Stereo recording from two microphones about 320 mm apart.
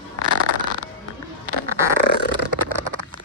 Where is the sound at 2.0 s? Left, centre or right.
Left.